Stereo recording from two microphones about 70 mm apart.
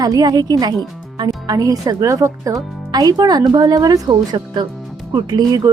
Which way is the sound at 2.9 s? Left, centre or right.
Right.